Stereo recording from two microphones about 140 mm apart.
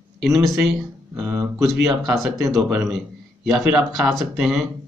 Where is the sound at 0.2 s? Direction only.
Centre (ahead or behind).